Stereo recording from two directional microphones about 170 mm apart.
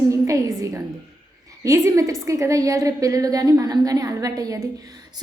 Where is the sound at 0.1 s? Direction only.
20° right (ahead or behind).